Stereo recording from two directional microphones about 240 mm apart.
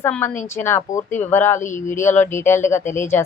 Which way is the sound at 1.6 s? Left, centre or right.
Left.